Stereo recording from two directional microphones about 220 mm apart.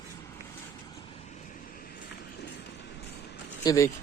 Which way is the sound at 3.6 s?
15° left (ahead or behind).